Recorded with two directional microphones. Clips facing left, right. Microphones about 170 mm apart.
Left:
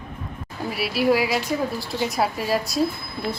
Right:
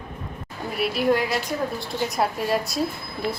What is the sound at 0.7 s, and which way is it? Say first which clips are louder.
Speech: left 1 dB; 5° left (ahead or behind).